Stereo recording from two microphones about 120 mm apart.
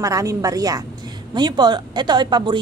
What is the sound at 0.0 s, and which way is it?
A woman's voice, 30° right (ahead or behind).